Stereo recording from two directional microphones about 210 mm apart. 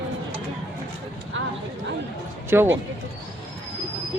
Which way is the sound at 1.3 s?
65° right (ahead or behind).